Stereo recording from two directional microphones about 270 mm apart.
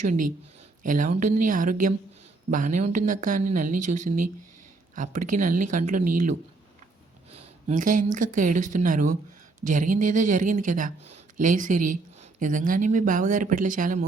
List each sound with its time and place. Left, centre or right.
0.0 s speech: right
7.7 s speech: right